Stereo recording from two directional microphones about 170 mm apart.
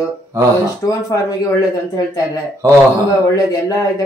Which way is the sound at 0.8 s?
20° left (ahead or behind).